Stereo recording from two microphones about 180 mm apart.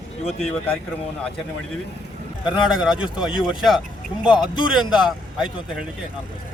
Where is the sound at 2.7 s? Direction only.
5° right (ahead or behind).